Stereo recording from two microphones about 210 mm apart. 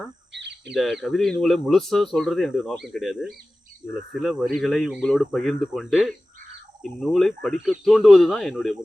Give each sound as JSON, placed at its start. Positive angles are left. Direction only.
{"t": 0.3, "sound": "crow", "side_deg": -55}
{"t": 0.7, "sound": "speech", "side_deg": 0}